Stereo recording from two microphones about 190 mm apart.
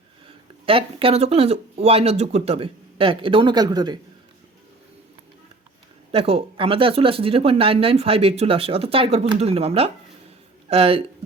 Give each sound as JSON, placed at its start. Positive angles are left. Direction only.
{"t": 0.6, "sound": "speech", "side_deg": -30}
{"t": 6.1, "sound": "speech", "side_deg": -30}